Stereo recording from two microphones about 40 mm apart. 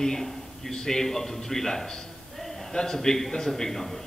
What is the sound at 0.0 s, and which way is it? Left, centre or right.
A man's voice, centre.